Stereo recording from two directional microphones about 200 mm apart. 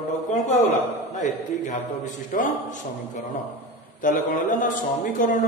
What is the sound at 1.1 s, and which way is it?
Speech, 40° left (ahead or behind).